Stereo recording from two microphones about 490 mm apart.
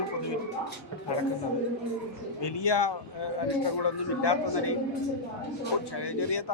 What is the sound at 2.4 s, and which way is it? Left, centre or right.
A man's voice, left.